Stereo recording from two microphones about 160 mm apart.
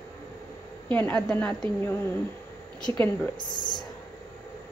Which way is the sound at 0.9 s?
10° left (ahead or behind).